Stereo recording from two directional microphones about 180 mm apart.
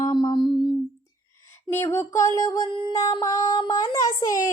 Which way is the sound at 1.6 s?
15° left (ahead or behind).